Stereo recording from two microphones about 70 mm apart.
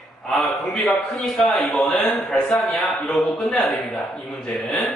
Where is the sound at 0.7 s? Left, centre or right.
Centre.